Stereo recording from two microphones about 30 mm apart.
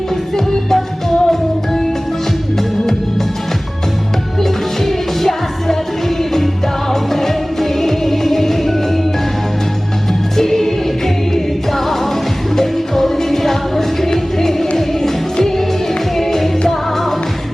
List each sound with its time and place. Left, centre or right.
0.3 s music: centre
4.4 s music: centre
6.9 s music: centre
10.3 s music: centre
12.5 s music: centre